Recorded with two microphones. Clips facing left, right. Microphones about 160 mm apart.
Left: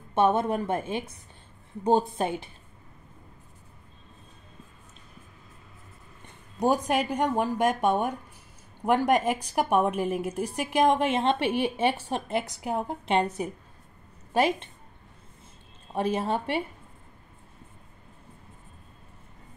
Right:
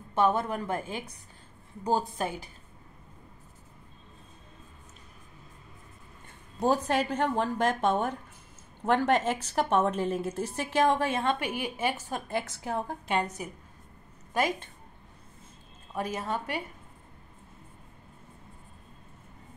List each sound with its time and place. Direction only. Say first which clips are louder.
0.1 s a woman's voice: left 3 dB; 25° left (ahead or behind)
6.2 s a woman's voice: left 2 dB; 15° left (ahead or behind)
15.9 s a woman's voice: left 5 dB; 25° left (ahead or behind)